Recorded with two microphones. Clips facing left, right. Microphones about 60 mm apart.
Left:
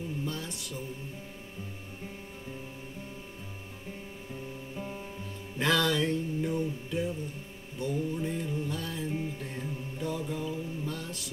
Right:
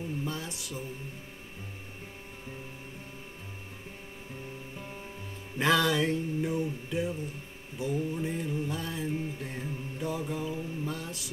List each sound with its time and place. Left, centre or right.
0.2 s mantra: centre
5.6 s music: centre
9.4 s mantra: centre